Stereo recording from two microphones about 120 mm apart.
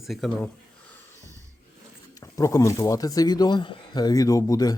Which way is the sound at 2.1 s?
30° left (ahead or behind).